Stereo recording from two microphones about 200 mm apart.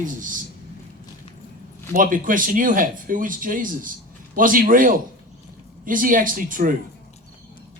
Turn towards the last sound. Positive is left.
turn(degrees=-45)  # may be behind; listen again after turning